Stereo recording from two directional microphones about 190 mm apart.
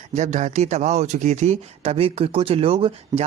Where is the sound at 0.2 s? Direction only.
40° right (ahead or behind).